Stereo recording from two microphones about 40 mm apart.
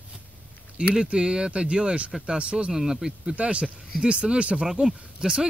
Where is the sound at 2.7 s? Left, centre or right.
Centre.